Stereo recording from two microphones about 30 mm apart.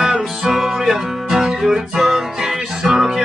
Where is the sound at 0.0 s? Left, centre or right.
Centre.